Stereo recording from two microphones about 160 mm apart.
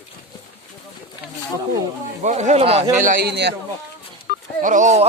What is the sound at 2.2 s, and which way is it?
Speech, 50° right (ahead or behind).